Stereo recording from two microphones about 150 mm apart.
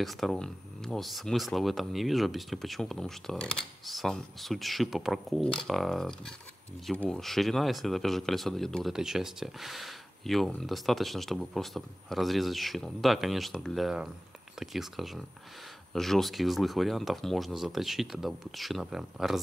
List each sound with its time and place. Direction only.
0.0 s speech: centre (ahead or behind)